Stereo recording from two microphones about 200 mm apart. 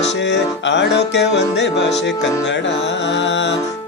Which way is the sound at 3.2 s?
65° left (ahead or behind).